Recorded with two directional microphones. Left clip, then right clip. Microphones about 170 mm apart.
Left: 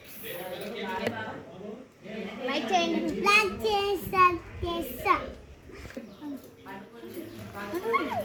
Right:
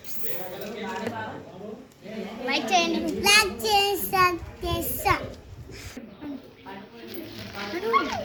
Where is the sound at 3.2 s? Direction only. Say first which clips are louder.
Right 3 dB; 30° right (ahead or behind).